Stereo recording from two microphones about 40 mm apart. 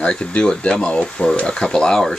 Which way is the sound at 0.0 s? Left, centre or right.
Left.